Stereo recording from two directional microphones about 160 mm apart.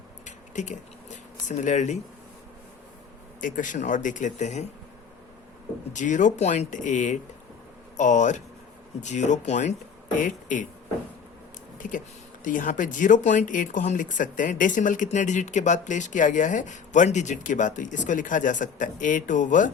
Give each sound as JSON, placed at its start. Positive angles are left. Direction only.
{"t": 0.3, "sound": "a sound", "side_deg": 50}
{"t": 3.4, "sound": "speech", "side_deg": 55}
{"t": 5.9, "sound": "speech", "side_deg": 50}
{"t": 11.8, "sound": "speech", "side_deg": 55}